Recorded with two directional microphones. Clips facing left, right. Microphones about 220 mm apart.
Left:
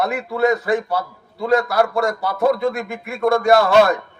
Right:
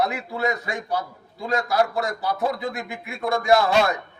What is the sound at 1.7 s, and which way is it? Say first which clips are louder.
Speech: left 4 dB; 55° left (ahead or behind).